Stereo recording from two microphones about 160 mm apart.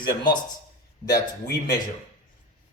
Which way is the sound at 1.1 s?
20° left (ahead or behind).